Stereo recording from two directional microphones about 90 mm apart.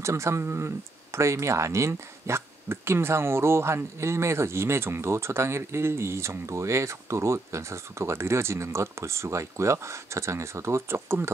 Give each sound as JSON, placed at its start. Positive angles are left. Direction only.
{"t": 0.0, "sound": "speech", "side_deg": -30}